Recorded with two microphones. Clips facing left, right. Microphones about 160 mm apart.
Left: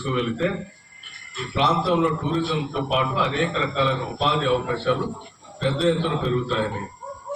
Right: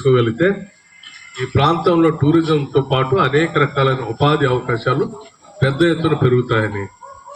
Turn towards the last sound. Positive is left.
turn(degrees=-80)